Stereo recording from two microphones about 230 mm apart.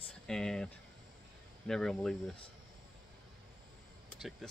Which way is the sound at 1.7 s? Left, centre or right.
Centre.